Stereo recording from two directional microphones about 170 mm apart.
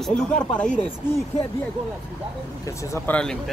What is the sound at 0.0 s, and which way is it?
Speech, 5° left (ahead or behind).